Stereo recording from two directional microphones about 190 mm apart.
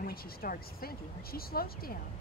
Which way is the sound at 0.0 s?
50° left (ahead or behind).